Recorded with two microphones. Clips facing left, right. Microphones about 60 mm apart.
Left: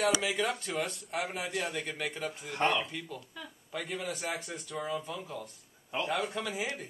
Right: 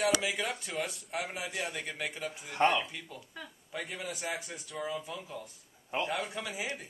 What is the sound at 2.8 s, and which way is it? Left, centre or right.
A man's voice, centre.